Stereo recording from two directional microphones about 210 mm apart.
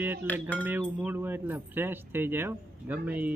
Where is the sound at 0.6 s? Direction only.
10° right (ahead or behind).